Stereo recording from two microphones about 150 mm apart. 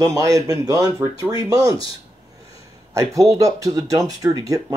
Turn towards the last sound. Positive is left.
turn(degrees=-25)  # may be behind; listen again after turning